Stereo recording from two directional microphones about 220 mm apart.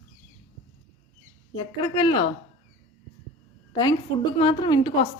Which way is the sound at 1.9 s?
20° left (ahead or behind).